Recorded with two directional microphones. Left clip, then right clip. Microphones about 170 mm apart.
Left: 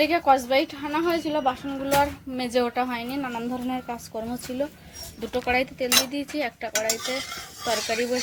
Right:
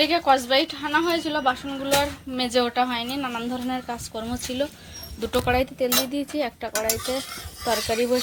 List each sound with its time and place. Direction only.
0.0 s a woman's voice: 10° left (ahead or behind)
5.3 s stir: 15° right (ahead or behind)
6.7 s stir: 5° right (ahead or behind)